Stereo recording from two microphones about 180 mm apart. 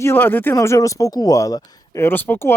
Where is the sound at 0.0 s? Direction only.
10° left (ahead or behind).